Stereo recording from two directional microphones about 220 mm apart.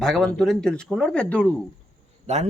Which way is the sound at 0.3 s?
Centre (ahead or behind).